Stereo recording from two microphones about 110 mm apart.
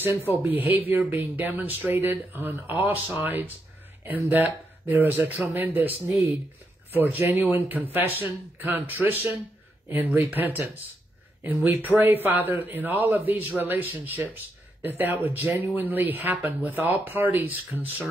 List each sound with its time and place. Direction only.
0.3 s speech: 15° right (ahead or behind)